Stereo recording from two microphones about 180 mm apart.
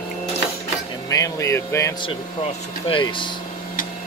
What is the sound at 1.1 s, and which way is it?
Speech, 20° left (ahead or behind).